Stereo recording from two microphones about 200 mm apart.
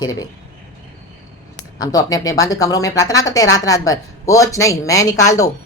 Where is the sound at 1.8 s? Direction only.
20° left (ahead or behind).